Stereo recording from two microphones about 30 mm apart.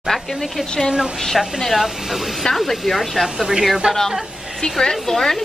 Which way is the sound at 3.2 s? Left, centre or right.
Centre.